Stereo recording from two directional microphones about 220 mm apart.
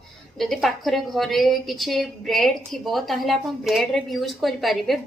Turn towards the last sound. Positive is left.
turn(degrees=0)  # may be behind; listen again after turning